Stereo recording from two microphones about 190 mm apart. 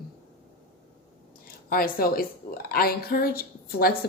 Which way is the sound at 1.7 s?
50° left (ahead or behind).